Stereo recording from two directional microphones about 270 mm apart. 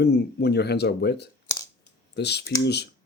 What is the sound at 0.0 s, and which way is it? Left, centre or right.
Speech, left.